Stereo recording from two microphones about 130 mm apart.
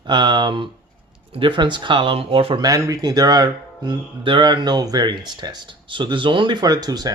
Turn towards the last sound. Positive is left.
turn(degrees=-30)  # may be behind; listen again after turning